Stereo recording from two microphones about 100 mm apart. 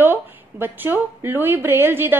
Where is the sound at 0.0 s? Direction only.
20° right (ahead or behind).